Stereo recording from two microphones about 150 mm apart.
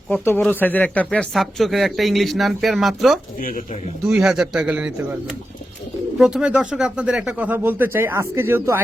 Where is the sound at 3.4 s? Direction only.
65° left (ahead or behind).